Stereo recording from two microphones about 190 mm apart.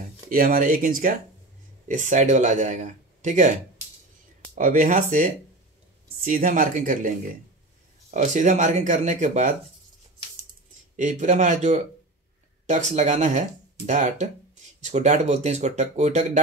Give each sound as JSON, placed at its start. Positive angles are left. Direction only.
{"t": 0.3, "sound": "speech", "side_deg": -50}
{"t": 4.6, "sound": "speech", "side_deg": -45}
{"t": 8.1, "sound": "speech", "side_deg": -40}
{"t": 11.0, "sound": "speech", "side_deg": -40}